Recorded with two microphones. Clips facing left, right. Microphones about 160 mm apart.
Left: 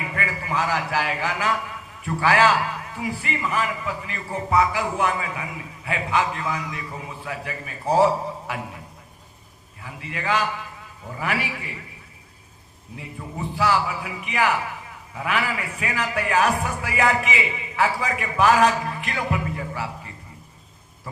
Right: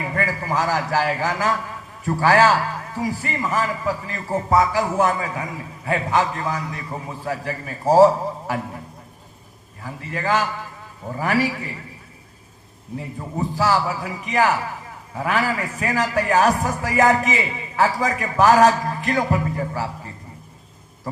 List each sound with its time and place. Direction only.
0.0 s a man's voice: 35° right (ahead or behind)
9.8 s a man's voice: 40° right (ahead or behind)
13.0 s a man's voice: 40° right (ahead or behind)